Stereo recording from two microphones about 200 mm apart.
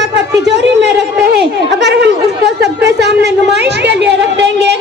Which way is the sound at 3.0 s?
55° right (ahead or behind).